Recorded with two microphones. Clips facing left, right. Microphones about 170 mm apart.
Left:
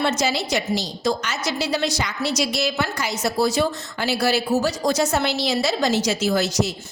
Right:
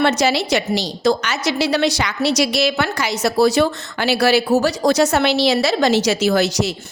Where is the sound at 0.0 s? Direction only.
70° right (ahead or behind).